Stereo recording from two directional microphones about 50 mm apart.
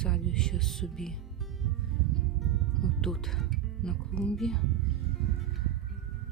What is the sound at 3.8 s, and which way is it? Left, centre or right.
Speech, centre.